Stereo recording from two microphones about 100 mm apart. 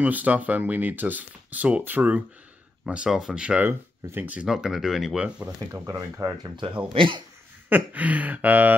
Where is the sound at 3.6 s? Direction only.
20° right (ahead or behind).